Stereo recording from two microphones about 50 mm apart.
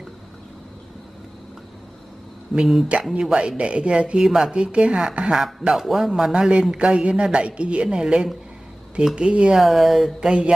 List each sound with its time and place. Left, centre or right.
2.5 s speech: centre
5.8 s speech: centre
9.6 s speech: centre